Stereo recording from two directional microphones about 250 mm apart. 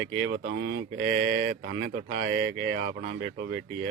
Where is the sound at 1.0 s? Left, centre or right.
Right.